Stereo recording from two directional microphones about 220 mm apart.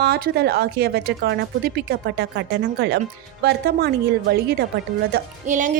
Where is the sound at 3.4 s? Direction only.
45° right (ahead or behind).